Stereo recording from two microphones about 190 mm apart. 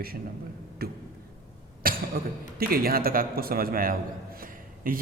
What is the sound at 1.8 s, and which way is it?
A man's voice, 50° right (ahead or behind).